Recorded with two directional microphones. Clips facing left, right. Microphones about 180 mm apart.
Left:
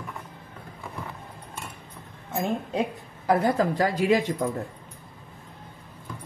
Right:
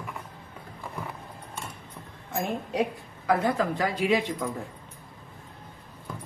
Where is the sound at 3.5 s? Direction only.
40° left (ahead or behind).